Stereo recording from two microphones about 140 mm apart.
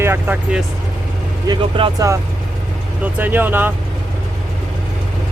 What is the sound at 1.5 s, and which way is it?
Speech, 35° right (ahead or behind).